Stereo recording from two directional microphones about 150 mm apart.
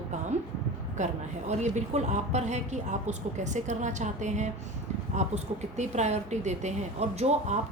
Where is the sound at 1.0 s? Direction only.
50° right (ahead or behind).